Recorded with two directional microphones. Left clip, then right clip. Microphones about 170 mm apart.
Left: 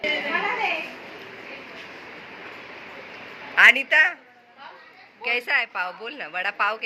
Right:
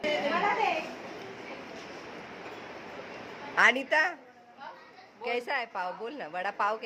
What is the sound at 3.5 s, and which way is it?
Speech, 30° right (ahead or behind).